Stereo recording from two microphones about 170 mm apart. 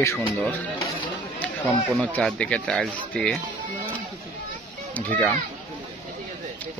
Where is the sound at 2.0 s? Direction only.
5° left (ahead or behind).